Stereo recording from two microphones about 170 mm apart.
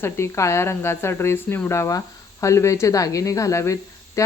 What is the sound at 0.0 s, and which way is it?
Speech, 15° left (ahead or behind).